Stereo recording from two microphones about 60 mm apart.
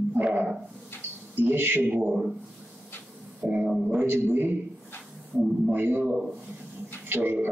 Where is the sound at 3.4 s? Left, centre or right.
Right.